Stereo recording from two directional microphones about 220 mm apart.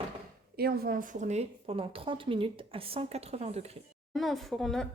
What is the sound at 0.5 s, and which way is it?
A woman's voice, 45° right (ahead or behind).